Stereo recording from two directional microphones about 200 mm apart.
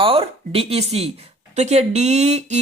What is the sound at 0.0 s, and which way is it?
Speech, 30° right (ahead or behind).